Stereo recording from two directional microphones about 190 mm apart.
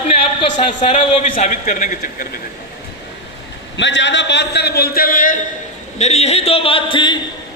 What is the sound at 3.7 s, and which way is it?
A man's voice, 70° left (ahead or behind).